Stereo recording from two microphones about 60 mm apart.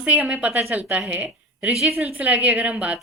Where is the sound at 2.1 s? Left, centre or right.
Right.